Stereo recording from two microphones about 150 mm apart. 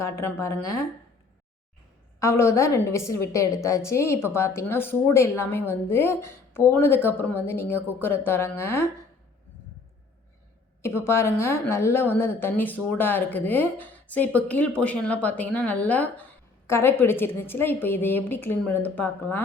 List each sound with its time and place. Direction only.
0.0 s speech: 20° left (ahead or behind)
2.1 s speech: 20° left (ahead or behind)
10.8 s speech: 15° left (ahead or behind)